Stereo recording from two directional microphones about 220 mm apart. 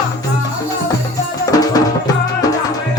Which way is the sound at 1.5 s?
15° left (ahead or behind).